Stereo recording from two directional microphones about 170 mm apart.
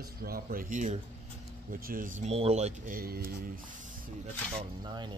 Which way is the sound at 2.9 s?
60° right (ahead or behind).